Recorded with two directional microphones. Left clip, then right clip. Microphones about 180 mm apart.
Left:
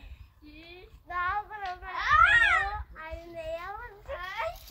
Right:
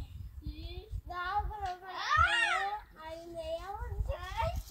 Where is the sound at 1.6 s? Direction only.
15° left (ahead or behind).